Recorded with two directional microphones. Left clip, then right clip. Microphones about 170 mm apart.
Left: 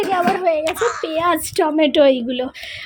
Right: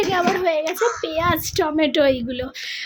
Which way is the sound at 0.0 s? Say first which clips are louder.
Left 2 dB; centre (ahead or behind).